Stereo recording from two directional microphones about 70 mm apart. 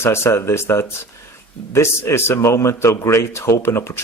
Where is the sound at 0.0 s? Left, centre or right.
Left.